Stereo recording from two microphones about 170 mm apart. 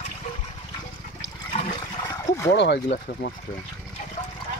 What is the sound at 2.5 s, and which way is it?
Speech, 90° left.